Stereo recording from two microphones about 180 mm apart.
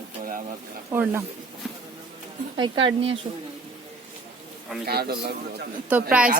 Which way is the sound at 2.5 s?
25° right (ahead or behind).